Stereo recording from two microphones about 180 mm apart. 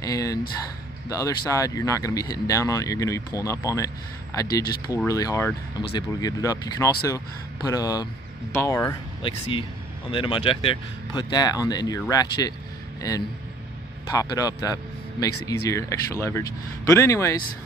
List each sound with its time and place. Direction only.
0.0 s a sound: 20° left (ahead or behind)
1.0 s speech: 20° left (ahead or behind)
9.2 s speech: 30° left (ahead or behind)
14.1 s speech: 20° left (ahead or behind)